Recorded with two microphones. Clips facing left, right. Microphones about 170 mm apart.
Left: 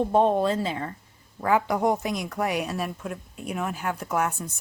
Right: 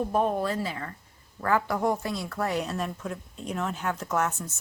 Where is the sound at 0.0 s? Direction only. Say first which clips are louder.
Left 5 dB; 25° left (ahead or behind).